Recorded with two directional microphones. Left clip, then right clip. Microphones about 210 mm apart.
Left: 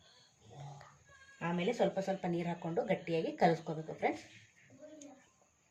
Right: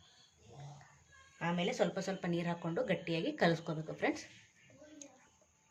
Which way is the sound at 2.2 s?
35° right (ahead or behind).